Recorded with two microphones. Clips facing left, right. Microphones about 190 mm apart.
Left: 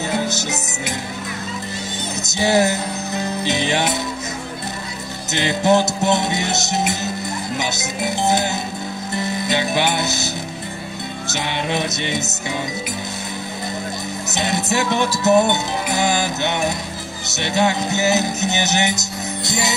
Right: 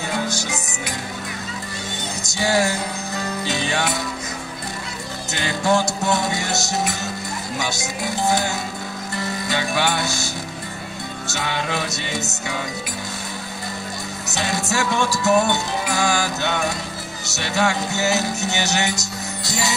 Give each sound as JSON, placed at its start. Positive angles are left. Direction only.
{"t": 0.1, "sound": "music", "side_deg": 20}
{"t": 2.2, "sound": "music", "side_deg": 20}
{"t": 5.3, "sound": "music", "side_deg": 20}
{"t": 11.3, "sound": "music", "side_deg": 20}
{"t": 14.3, "sound": "music", "side_deg": 20}